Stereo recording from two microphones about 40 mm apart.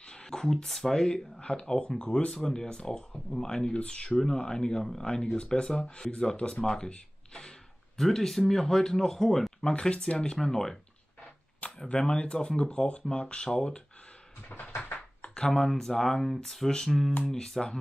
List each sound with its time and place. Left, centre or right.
0.1 s a sound: centre
0.7 s speech: centre; by 6.6 s left
6.6 s a sound: left
8.0 s speech: centre
11.9 s speech: left
14.9 s computer keyboard: left
15.3 s speech: left
15.7 s speech: centre